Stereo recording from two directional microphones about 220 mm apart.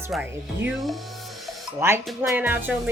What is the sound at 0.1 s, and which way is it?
Speech, 5° right (ahead or behind).